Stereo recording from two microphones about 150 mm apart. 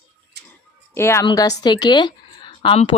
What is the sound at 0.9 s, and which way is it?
Speech, 15° left (ahead or behind).